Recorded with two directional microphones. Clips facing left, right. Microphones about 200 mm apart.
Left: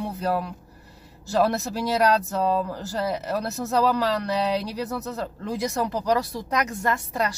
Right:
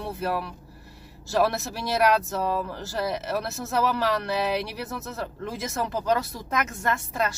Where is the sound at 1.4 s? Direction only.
15° left (ahead or behind).